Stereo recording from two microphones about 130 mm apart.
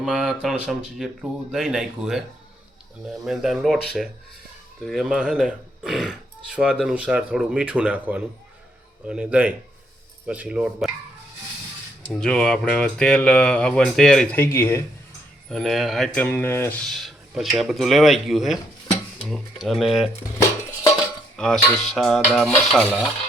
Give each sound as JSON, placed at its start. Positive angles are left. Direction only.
{"t": 0.0, "sound": "speech", "side_deg": -5}
{"t": 3.2, "sound": "speech", "side_deg": 0}
{"t": 12.0, "sound": "speech", "side_deg": 5}
{"t": 14.3, "sound": "speech", "side_deg": 15}
{"t": 15.4, "sound": "speech", "side_deg": 0}
{"t": 16.1, "sound": "speech", "side_deg": 15}
{"t": 16.8, "sound": "a sound", "side_deg": 0}
{"t": 17.6, "sound": "speech", "side_deg": 0}
{"t": 21.3, "sound": "cutlery", "side_deg": 5}
{"t": 21.9, "sound": "speech", "side_deg": 0}